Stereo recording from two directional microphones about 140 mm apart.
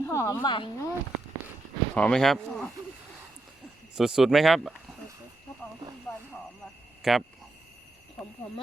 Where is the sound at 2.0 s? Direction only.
5° left (ahead or behind).